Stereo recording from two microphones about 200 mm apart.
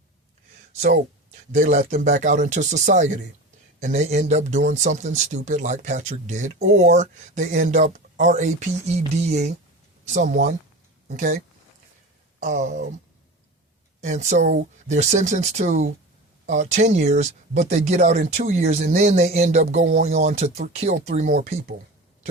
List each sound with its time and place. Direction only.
0.8 s speech: 40° right (ahead or behind)
12.4 s speech: 40° right (ahead or behind)
14.0 s speech: 35° right (ahead or behind)